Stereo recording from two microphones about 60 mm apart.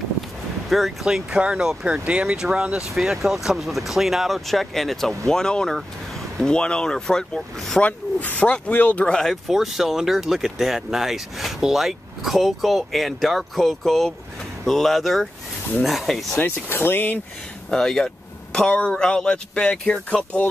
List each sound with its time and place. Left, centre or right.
0.7 s speech: centre
1.0 s speech: centre
7.8 s speech: left
9.0 s speech: centre
9.5 s speech: centre
16.3 s speech: left
17.6 s a sound: centre
18.7 s speech: centre